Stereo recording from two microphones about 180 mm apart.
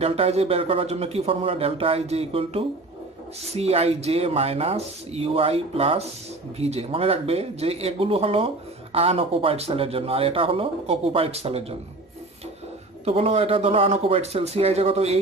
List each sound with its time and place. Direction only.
0.0 s speech: 35° right (ahead or behind)
13.0 s speech: 35° right (ahead or behind)